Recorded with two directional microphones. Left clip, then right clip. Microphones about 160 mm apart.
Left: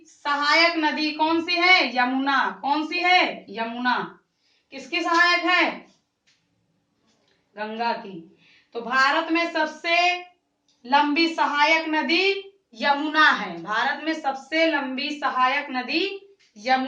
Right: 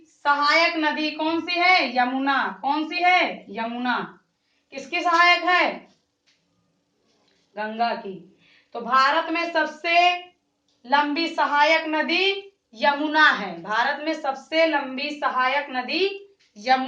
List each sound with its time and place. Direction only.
0.2 s a woman's voice: 15° right (ahead or behind)
4.7 s a woman's voice: 20° right (ahead or behind)
8.9 s a woman's voice: 25° right (ahead or behind)
10.8 s a woman's voice: 15° right (ahead or behind)